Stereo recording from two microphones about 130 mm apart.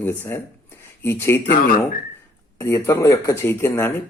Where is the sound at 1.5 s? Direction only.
90° left.